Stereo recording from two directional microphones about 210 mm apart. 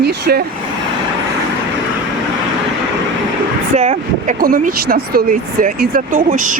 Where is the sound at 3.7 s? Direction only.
35° right (ahead or behind).